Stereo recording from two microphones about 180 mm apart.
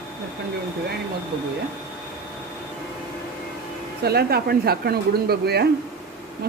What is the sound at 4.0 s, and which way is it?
Speech, 60° right (ahead or behind).